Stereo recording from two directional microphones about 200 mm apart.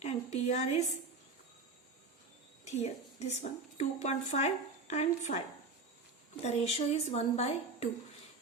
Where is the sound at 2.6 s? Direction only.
35° left (ahead or behind).